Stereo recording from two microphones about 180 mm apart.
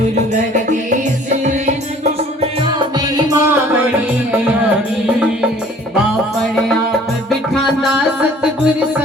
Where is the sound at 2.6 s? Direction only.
25° right (ahead or behind).